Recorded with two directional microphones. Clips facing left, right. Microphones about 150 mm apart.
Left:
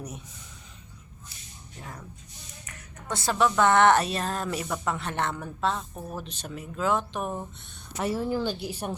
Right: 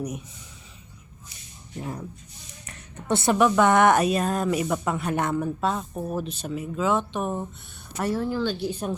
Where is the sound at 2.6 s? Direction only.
30° right (ahead or behind).